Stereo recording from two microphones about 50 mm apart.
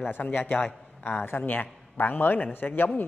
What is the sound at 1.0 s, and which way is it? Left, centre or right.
A man's voice, left.